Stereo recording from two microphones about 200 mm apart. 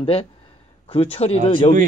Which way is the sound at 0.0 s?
25° left (ahead or behind).